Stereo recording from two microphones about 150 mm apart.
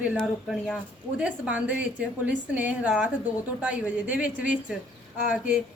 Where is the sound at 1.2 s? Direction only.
5° right (ahead or behind).